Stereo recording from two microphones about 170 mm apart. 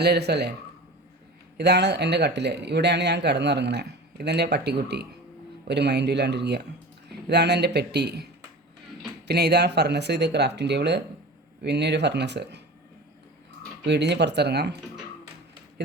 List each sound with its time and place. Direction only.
0.0 s speech: 75° right (ahead or behind)
1.5 s speech: 80° right
13.8 s speech: 90° right; by 14.8 s 75° right (ahead or behind)